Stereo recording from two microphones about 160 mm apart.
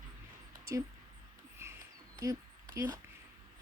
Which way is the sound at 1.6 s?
20° right (ahead or behind).